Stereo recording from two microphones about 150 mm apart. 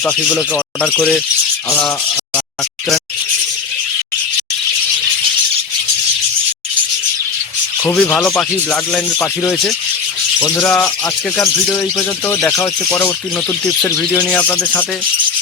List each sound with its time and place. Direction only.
0.0 s speech: 5° left (ahead or behind)
7.9 s speech: 10° left (ahead or behind)
9.1 s speech: 20° left (ahead or behind)
14.3 s speech: 10° left (ahead or behind)